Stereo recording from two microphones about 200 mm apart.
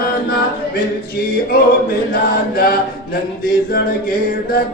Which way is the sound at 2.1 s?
45° left (ahead or behind).